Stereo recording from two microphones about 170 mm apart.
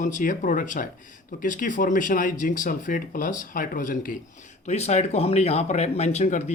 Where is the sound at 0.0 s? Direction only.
50° left (ahead or behind).